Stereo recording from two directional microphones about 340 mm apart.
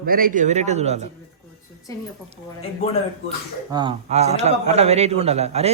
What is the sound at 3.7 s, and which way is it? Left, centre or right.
A man's voice, centre.